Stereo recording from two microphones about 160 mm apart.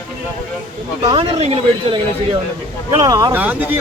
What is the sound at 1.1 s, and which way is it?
Speech, 35° right (ahead or behind).